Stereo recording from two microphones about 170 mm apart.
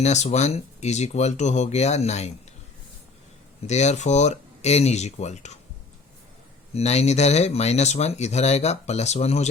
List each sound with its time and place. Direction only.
0.0 s speech: 40° left (ahead or behind)
3.7 s speech: 40° left (ahead or behind)
6.7 s speech: 40° left (ahead or behind)